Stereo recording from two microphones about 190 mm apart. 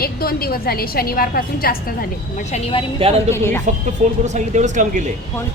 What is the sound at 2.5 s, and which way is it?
Speech, 35° left (ahead or behind).